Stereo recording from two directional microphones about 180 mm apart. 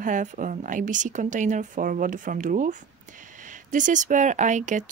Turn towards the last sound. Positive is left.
turn(degrees=-40)  # may be behind; listen again after turning